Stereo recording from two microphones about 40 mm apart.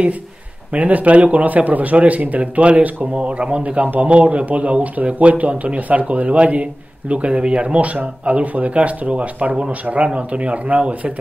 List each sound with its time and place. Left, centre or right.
0.7 s speech: right
3.2 s speech: right
10.0 s speech: right